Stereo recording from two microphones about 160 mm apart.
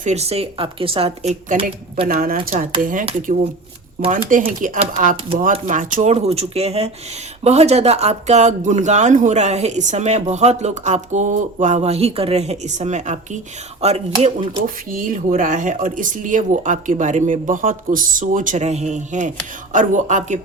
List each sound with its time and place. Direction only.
0.0 s speech: 45° right (ahead or behind)
2.0 s a woman's voice: 60° right (ahead or behind)
4.1 s a woman's voice: 55° right (ahead or behind)
14.8 s speech: 60° right (ahead or behind)